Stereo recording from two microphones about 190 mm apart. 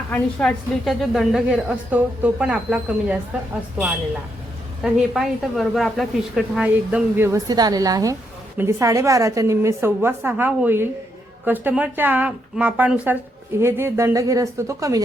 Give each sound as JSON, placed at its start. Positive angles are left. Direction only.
{"t": 0.1, "sound": "a woman's voice", "side_deg": 5}
{"t": 4.8, "sound": "a woman's voice", "side_deg": -5}